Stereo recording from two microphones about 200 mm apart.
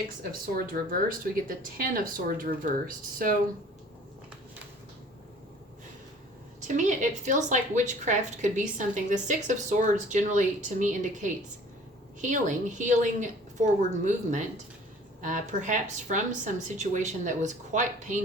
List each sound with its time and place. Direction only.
0.2 s speech: 45° right (ahead or behind)
6.6 s speech: 35° right (ahead or behind)